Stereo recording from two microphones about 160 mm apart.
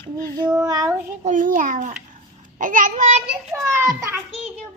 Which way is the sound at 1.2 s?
55° right (ahead or behind).